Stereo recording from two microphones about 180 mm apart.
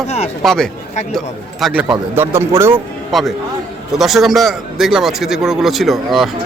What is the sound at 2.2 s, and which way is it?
Speech, 15° right (ahead or behind).